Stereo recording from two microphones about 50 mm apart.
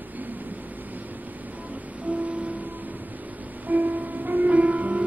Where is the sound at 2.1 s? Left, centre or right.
Right.